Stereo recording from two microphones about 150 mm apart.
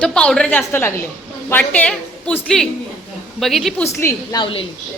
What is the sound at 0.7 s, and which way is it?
A woman's voice, 15° left (ahead or behind).